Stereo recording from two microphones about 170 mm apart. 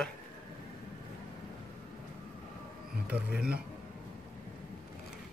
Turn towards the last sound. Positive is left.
turn(degrees=-5)  # may be behind; listen again after turning